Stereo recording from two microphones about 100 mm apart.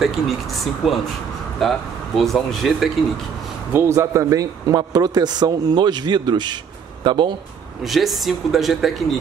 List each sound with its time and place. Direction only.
0.0 s speech: centre (ahead or behind)
3.7 s a man's voice: 25° right (ahead or behind); by 7.3 s 50° right (ahead or behind)
7.8 s speech: centre (ahead or behind)